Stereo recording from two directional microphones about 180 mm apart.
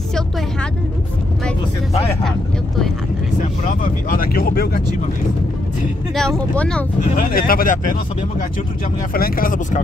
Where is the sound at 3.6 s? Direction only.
50° left (ahead or behind).